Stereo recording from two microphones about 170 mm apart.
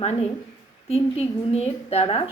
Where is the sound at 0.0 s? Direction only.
40° left (ahead or behind).